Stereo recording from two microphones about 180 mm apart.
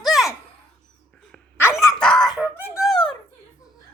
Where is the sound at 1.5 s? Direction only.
15° left (ahead or behind).